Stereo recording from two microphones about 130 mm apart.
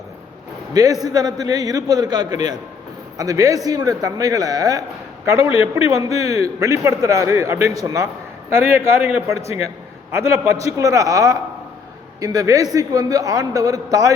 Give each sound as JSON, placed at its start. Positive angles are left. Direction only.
{"t": 0.7, "sound": "a man's voice", "side_deg": -30}
{"t": 6.1, "sound": "a man's voice", "side_deg": 55}
{"t": 6.3, "sound": "a man's voice", "side_deg": -25}
{"t": 10.1, "sound": "a man's voice", "side_deg": -20}